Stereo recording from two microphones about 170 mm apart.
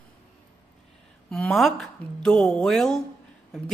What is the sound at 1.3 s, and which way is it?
A woman's voice, centre (ahead or behind).